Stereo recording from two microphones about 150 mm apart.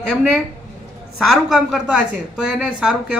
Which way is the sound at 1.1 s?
Centre (ahead or behind).